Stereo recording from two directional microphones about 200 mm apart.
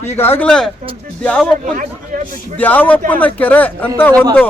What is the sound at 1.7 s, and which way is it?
Speech, 40° right (ahead or behind).